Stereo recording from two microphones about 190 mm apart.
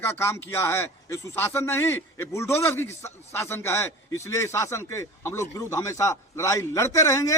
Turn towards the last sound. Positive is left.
turn(degrees=15)  # may be behind; listen again after turning